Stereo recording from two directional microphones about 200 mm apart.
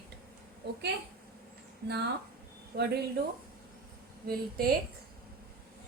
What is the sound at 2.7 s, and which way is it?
Speech, 50° right (ahead or behind).